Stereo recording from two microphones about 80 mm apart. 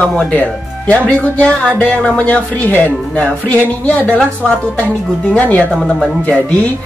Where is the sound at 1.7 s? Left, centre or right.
Centre.